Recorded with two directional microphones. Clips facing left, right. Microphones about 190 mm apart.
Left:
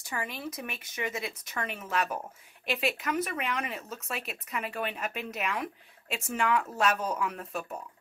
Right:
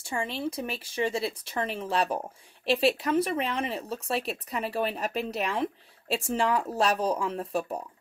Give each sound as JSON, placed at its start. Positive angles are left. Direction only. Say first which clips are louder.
{"t": 0.0, "sound": "speech", "louder": "right 5 dB", "side_deg": -30}